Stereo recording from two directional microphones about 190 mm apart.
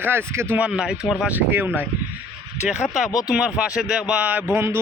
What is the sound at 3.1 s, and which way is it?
Speech, 20° left (ahead or behind).